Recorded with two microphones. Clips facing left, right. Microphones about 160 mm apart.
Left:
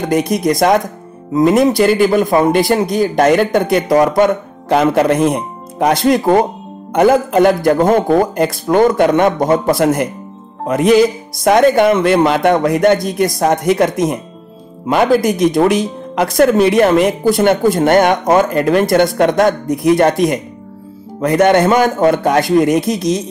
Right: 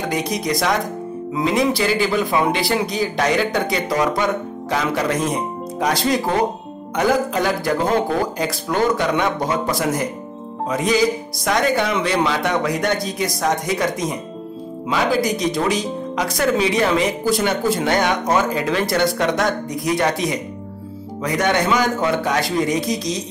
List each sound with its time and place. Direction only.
0.1 s a man's voice: 50° left (ahead or behind)